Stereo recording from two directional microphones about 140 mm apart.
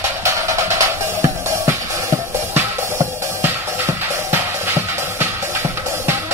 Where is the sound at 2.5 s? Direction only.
15° right (ahead or behind).